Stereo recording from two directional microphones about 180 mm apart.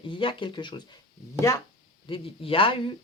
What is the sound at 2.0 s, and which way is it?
Speech, 30° left (ahead or behind).